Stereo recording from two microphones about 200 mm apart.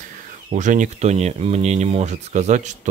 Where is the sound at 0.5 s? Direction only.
40° right (ahead or behind).